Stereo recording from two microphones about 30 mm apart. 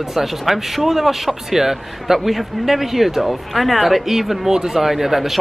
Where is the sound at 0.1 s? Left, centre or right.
Centre.